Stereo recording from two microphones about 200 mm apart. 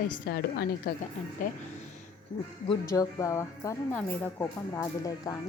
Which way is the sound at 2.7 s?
20° left (ahead or behind).